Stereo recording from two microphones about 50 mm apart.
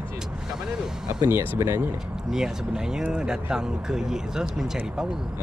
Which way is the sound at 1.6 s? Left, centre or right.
Right.